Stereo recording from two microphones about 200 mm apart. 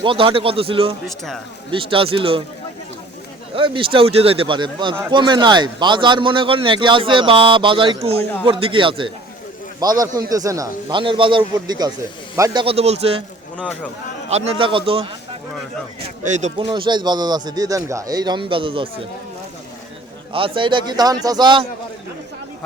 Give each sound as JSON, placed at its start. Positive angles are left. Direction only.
{"t": 0.0, "sound": "speech", "side_deg": -25}
{"t": 1.0, "sound": "a man's voice", "side_deg": 0}
{"t": 1.7, "sound": "speech", "side_deg": -25}
{"t": 3.5, "sound": "speech", "side_deg": -25}
{"t": 13.6, "sound": "speech", "side_deg": 5}
{"t": 14.3, "sound": "speech", "side_deg": -30}
{"t": 16.3, "sound": "speech", "side_deg": -30}
{"t": 20.3, "sound": "speech", "side_deg": -25}